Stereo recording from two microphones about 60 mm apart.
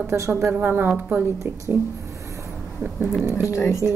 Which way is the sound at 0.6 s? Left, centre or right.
Right.